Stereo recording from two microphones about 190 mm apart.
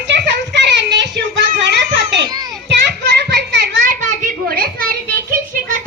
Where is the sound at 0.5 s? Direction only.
65° right (ahead or behind).